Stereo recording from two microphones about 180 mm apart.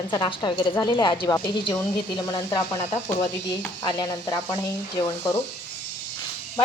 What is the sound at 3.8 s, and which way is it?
Speech, 25° left (ahead or behind).